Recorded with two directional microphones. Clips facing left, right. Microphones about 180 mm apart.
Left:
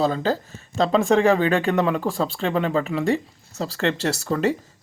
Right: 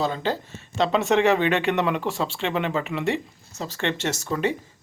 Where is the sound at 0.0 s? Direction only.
35° left (ahead or behind).